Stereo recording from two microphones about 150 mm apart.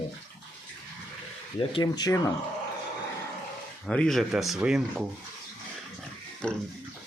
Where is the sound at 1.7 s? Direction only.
25° left (ahead or behind).